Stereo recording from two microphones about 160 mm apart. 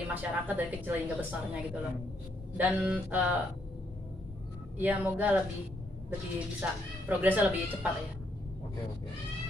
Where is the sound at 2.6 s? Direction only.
10° right (ahead or behind).